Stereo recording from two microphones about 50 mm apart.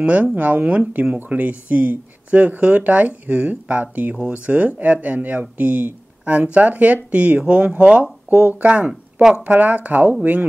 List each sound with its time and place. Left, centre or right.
0.0 s speech: right
8.6 s speech: right